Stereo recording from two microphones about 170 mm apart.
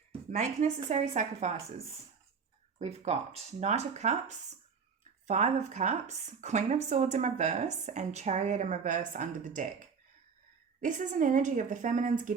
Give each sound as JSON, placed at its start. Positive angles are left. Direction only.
{"t": 0.3, "sound": "speech", "side_deg": -45}
{"t": 2.7, "sound": "speech", "side_deg": -40}
{"t": 10.8, "sound": "speech", "side_deg": -50}